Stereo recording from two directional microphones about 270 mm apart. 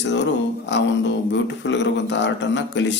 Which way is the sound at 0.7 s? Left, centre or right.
Left.